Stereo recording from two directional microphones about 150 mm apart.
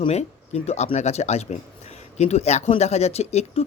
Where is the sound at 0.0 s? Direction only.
45° left (ahead or behind).